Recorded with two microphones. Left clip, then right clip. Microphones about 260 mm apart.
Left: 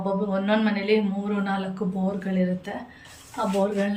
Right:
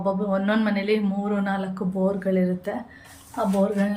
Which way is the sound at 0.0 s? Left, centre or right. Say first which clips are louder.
Right 2 dB; centre.